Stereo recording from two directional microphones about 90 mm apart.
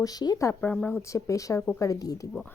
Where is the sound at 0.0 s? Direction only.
45° left (ahead or behind).